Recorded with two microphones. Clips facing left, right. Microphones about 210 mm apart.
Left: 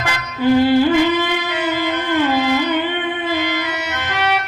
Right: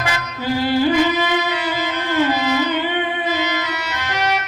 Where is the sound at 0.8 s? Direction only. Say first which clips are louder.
Left 2 dB; 50° left (ahead or behind).